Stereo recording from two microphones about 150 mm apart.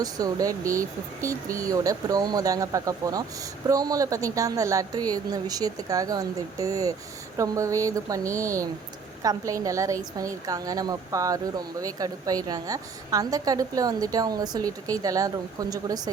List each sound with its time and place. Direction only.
0.0 s a woman's voice: 25° right (ahead or behind)